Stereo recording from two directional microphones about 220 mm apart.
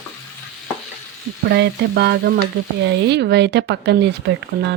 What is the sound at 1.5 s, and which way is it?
Speech, 50° right (ahead or behind).